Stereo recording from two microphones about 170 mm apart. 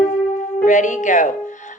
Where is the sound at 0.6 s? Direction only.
45° left (ahead or behind).